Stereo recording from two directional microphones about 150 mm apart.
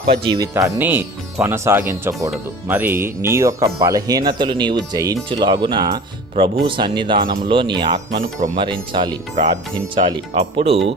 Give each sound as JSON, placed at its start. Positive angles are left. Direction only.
{"t": 0.3, "sound": "speech", "side_deg": -25}
{"t": 9.3, "sound": "speech", "side_deg": -50}
{"t": 9.9, "sound": "speech", "side_deg": -35}